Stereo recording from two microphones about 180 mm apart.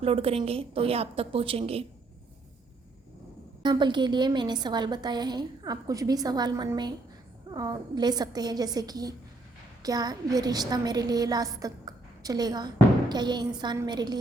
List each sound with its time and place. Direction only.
0.0 s a woman's voice: 30° right (ahead or behind)
3.6 s a woman's voice: 25° right (ahead or behind)